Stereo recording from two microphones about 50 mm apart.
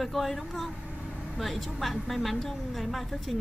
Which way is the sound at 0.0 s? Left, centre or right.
Centre.